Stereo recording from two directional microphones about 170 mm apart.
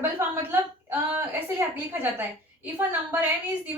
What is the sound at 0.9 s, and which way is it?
A woman's voice, 10° right (ahead or behind).